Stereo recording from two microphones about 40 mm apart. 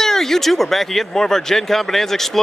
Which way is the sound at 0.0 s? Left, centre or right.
Centre.